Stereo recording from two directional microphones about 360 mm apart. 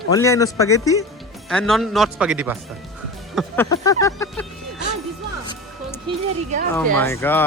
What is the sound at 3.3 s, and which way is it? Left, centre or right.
Speech, centre.